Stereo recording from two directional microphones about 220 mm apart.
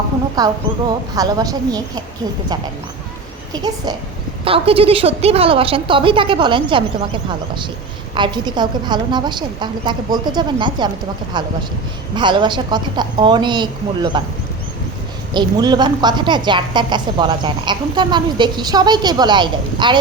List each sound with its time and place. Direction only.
0.4 s a woman's voice: 15° right (ahead or behind)
3.5 s a woman's voice: 20° right (ahead or behind)
15.3 s a woman's voice: 20° right (ahead or behind)